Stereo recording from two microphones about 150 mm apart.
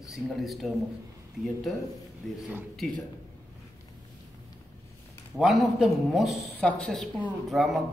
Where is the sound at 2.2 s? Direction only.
5° left (ahead or behind).